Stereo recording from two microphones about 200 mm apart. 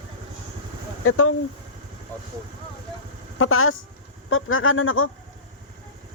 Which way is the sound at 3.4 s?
90° left.